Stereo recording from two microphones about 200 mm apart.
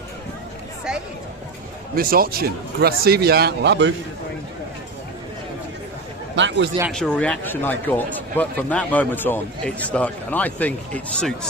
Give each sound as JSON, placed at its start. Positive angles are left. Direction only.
{"t": 2.0, "sound": "speech", "side_deg": -45}
{"t": 6.3, "sound": "speech", "side_deg": -65}
{"t": 6.9, "sound": "speech", "side_deg": 5}